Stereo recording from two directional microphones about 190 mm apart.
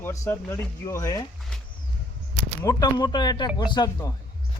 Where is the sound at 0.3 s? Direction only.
10° left (ahead or behind).